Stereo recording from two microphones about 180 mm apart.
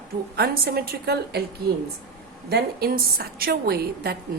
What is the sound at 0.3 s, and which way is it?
A woman's voice, 60° right (ahead or behind).